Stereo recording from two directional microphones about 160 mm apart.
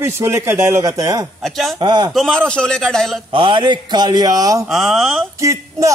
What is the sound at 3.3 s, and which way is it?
Speech, 30° right (ahead or behind).